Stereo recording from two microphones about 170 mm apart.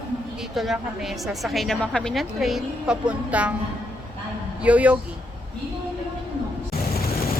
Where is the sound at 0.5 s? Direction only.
Centre (ahead or behind).